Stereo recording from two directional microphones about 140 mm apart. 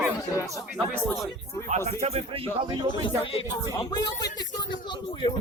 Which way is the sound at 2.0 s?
45° right (ahead or behind).